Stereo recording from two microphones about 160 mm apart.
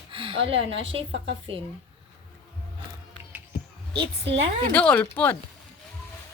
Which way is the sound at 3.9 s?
35° right (ahead or behind).